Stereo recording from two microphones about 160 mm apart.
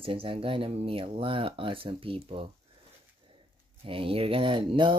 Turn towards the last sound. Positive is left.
turn(degrees=-30)  # may be behind; listen again after turning